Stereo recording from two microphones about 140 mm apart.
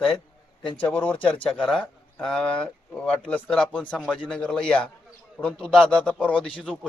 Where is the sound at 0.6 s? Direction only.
35° left (ahead or behind).